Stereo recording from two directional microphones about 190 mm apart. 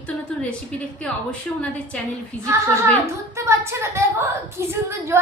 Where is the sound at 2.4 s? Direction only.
15° right (ahead or behind).